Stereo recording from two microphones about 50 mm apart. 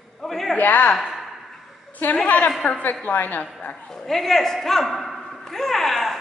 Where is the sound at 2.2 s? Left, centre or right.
Left.